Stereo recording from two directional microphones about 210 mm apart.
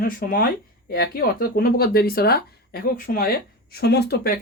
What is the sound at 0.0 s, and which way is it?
Speech, 45° left (ahead or behind).